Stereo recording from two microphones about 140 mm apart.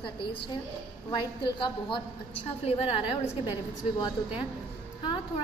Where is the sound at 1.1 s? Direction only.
35° left (ahead or behind).